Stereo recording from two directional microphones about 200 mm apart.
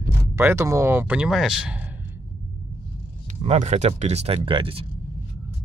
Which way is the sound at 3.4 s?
30° right (ahead or behind).